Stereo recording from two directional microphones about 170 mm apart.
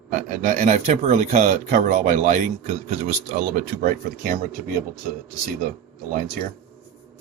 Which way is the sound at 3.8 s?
60° right (ahead or behind).